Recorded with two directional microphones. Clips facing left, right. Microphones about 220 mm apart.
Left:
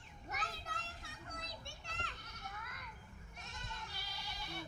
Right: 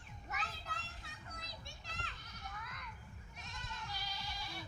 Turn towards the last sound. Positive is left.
turn(degrees=55)  # may be behind; listen again after turning